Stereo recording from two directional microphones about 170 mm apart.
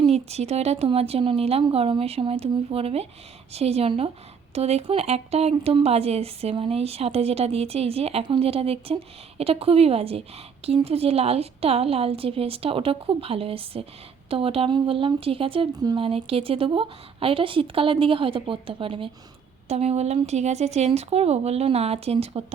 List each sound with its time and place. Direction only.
0.0 s speech: 40° right (ahead or behind)